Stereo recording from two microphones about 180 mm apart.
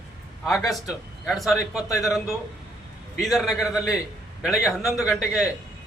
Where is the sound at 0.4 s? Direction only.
Centre (ahead or behind).